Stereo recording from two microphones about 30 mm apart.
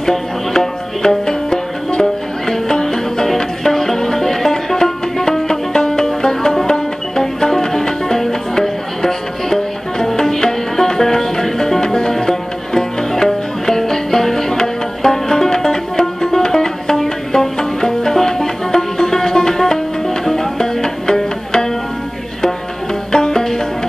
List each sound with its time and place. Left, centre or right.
0.0 s music: centre
23.1 s music: left